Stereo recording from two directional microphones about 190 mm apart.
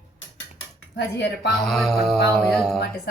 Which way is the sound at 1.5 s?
Centre (ahead or behind).